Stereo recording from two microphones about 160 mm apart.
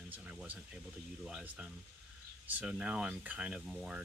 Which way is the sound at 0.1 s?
10° right (ahead or behind).